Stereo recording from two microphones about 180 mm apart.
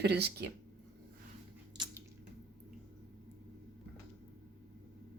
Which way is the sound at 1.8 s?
25° right (ahead or behind).